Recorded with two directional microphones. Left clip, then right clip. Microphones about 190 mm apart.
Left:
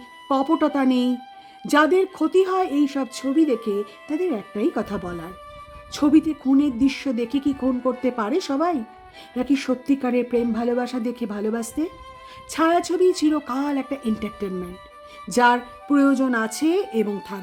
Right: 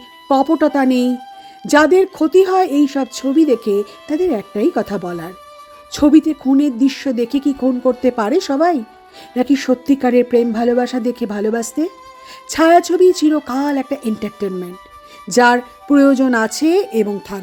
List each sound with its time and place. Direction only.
0.3 s speech: 20° right (ahead or behind)